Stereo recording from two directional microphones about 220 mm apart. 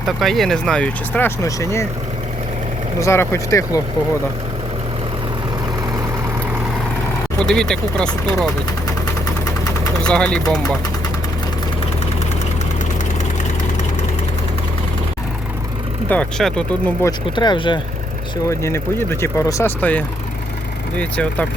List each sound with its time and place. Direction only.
0.2 s speech: centre (ahead or behind)
3.0 s speech: 15° left (ahead or behind)
7.3 s speech: 5° left (ahead or behind)
10.0 s speech: 5° left (ahead or behind)
16.0 s speech: 5° left (ahead or behind)
17.1 s speech: 20° left (ahead or behind)